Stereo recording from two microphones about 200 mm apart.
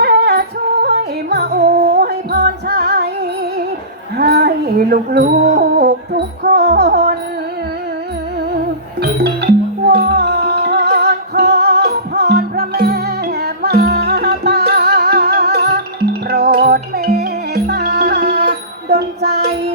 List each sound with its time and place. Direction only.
0.0 s yodeling: 50° right (ahead or behind)
4.2 s music: 50° right (ahead or behind)
9.0 s music: 55° right (ahead or behind)